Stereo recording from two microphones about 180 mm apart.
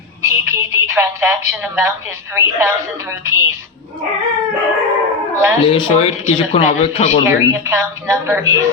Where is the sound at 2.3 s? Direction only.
15° right (ahead or behind).